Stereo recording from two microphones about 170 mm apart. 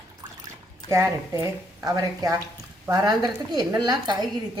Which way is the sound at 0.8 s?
20° right (ahead or behind).